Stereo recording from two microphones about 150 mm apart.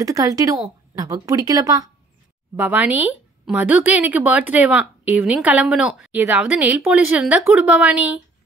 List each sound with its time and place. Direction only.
0.0 s speech: 20° right (ahead or behind)
2.5 s speech: 10° right (ahead or behind)